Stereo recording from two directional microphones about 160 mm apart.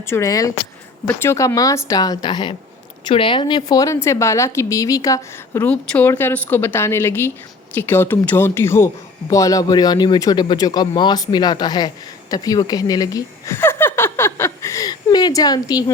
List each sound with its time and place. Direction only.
0.0 s speech: 15° left (ahead or behind)
5.6 s a woman's voice: 10° left (ahead or behind); by 15.8 s 25° left (ahead or behind)